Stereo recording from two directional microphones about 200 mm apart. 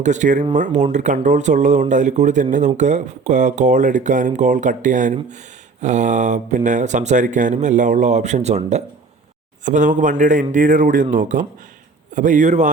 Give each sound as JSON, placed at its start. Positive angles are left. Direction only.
{"t": 0.0, "sound": "speech", "side_deg": -40}